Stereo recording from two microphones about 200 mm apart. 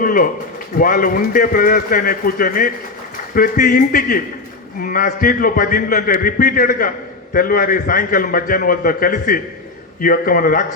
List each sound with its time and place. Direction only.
0.0 s a man's voice: 45° left (ahead or behind)